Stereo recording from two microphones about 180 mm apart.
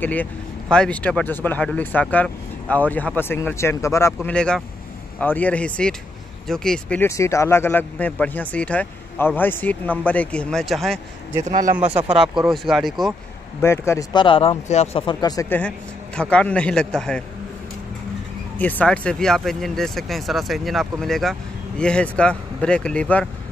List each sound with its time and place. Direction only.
0.0 s speech: 10° left (ahead or behind)
11.5 s speech: 45° right (ahead or behind)
12.4 s speech: centre (ahead or behind)
13.6 s speech: 15° left (ahead or behind)
14.1 s speech: 30° left (ahead or behind)
16.2 s speech: 5° left (ahead or behind)
18.6 s speech: 10° left (ahead or behind)